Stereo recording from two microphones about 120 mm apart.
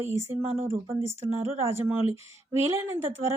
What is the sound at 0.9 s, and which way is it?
Speech, 20° right (ahead or behind).